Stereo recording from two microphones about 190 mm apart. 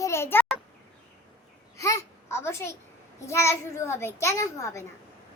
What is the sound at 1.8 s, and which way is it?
A child's voice, 15° left (ahead or behind).